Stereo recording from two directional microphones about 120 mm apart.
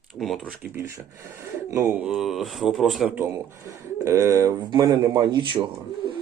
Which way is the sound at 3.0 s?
15° right (ahead or behind).